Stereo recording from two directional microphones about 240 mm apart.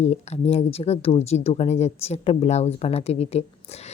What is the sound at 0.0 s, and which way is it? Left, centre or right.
A woman's voice, left.